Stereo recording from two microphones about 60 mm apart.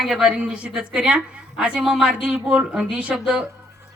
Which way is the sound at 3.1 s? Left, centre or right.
Centre.